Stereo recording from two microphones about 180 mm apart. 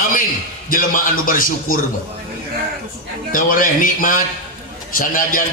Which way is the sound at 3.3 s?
50° left (ahead or behind).